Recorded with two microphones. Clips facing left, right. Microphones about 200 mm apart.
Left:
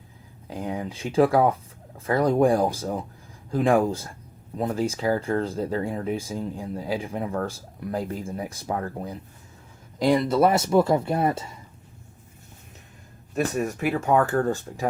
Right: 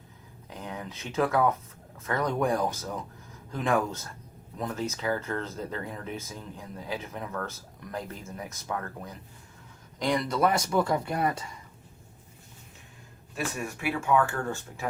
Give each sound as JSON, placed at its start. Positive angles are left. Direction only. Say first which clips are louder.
{"t": 0.4, "sound": "speech", "louder": "left 8 dB", "side_deg": 30}
{"t": 13.3, "sound": "speech", "louder": "left 8 dB", "side_deg": 40}